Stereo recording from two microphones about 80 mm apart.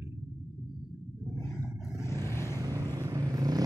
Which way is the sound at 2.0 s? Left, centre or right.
Left.